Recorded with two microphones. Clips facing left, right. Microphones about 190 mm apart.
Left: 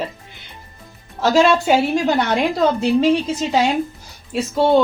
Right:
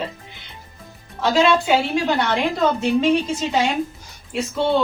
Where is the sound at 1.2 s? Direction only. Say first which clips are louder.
Left 3 dB; 45° left (ahead or behind).